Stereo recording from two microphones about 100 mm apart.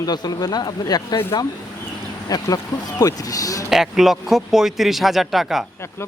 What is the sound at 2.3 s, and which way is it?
Speech, 40° left (ahead or behind).